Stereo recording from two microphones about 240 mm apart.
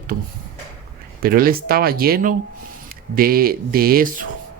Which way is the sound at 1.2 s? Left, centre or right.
Right.